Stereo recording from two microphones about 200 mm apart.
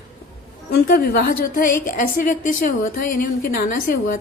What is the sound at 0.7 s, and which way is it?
A woman's voice, 50° left (ahead or behind).